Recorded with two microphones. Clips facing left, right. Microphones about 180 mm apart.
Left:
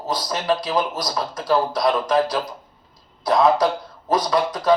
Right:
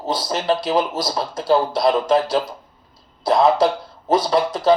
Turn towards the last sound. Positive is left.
turn(degrees=-25)  # may be behind; listen again after turning